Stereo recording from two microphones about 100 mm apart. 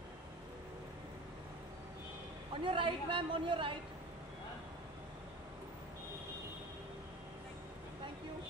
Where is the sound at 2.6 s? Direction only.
55° right (ahead or behind).